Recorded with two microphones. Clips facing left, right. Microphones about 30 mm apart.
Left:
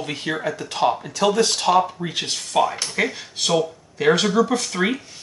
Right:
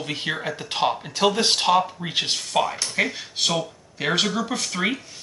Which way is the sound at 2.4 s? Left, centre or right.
Centre.